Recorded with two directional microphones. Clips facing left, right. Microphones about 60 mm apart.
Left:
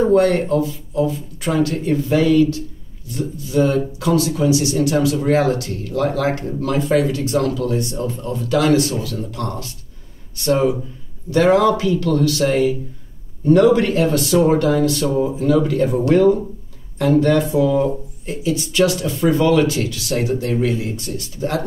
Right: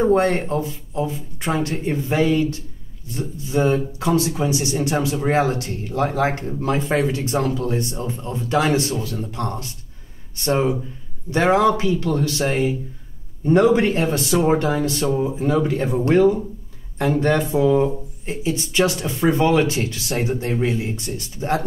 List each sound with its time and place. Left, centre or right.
0.0 s speech: right